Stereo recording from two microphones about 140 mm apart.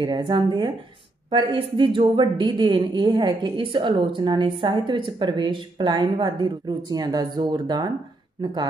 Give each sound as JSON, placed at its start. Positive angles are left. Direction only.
{"t": 0.0, "sound": "a woman's voice", "side_deg": -35}